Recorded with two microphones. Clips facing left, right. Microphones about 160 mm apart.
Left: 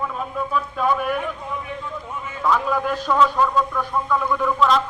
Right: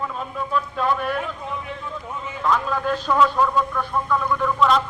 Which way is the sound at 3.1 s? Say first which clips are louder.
Left 1 dB; centre (ahead or behind).